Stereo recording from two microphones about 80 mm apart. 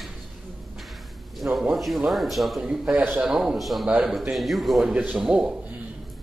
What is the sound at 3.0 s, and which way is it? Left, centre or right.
Speech, right.